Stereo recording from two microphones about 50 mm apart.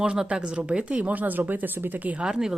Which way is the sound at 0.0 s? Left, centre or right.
Centre.